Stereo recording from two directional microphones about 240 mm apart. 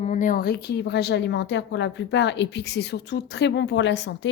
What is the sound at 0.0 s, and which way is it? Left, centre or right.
A woman's voice, left.